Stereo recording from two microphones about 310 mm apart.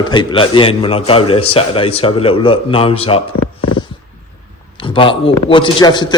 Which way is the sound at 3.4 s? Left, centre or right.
Left.